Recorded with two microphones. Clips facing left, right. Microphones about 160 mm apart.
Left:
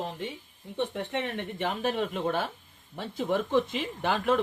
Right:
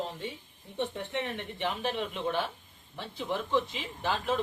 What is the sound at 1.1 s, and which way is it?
Speech, 55° left (ahead or behind).